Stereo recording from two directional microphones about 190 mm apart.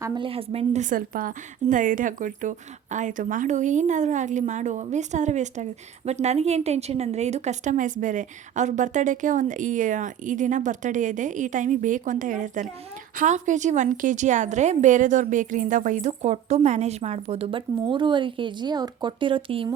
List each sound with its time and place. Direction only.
0.0 s a woman's voice: 25° right (ahead or behind)